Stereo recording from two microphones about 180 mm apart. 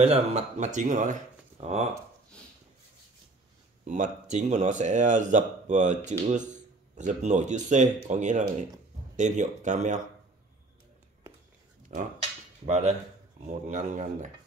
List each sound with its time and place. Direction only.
0.0 s speech: 35° right (ahead or behind)
3.8 s speech: 40° right (ahead or behind)
11.9 s speech: 50° right (ahead or behind)